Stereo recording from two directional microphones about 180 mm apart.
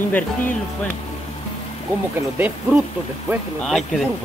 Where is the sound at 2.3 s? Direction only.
10° right (ahead or behind).